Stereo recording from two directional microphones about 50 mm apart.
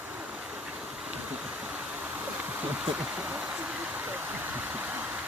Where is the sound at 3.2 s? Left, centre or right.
Right.